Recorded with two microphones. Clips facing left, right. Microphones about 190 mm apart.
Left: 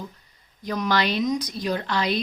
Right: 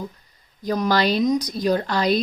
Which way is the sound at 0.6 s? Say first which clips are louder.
Right 4 dB; 35° right (ahead or behind).